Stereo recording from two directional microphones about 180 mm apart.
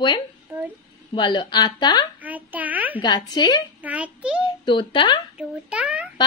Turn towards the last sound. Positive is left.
turn(degrees=-5)  # may be behind; listen again after turning